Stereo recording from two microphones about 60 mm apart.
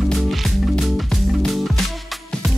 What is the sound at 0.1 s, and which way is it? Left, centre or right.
Music, centre.